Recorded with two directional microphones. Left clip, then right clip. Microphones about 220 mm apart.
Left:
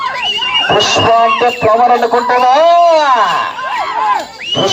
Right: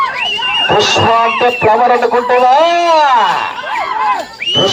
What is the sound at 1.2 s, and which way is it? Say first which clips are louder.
Speech: left 1 dB; 15° right (ahead or behind).